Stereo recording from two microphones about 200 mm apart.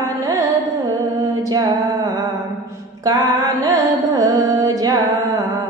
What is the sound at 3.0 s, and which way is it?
Carnatic music, 20° right (ahead or behind).